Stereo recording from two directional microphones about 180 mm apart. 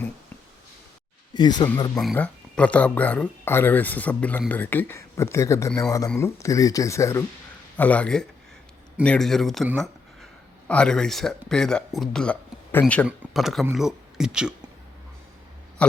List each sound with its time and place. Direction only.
1.3 s speech: 25° left (ahead or behind)
2.0 s speech: 5° left (ahead or behind)
9.7 s a sound: centre (ahead or behind)
10.7 s speech: 5° left (ahead or behind)
15.8 s burping: 5° left (ahead or behind)